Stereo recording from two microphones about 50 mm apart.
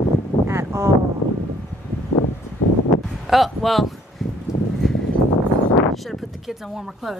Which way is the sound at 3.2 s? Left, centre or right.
Centre.